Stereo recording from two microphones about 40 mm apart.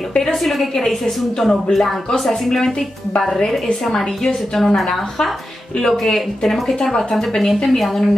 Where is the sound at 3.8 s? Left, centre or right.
Centre.